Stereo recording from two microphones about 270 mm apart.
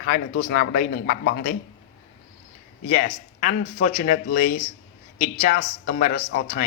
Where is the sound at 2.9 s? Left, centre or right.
Left.